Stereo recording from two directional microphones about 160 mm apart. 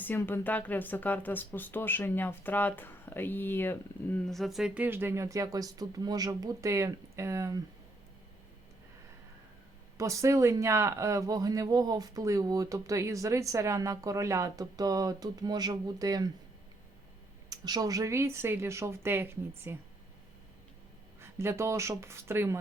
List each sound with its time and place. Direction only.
0.0 s speech: 10° left (ahead or behind)
4.3 s speech: centre (ahead or behind); by 7.6 s 20° right (ahead or behind)
10.0 s speech: 20° right (ahead or behind)
17.5 s speech: 25° right (ahead or behind)
21.2 s speech: 15° right (ahead or behind)